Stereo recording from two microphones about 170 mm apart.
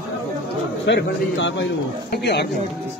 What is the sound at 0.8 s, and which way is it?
A man's voice, 90° left.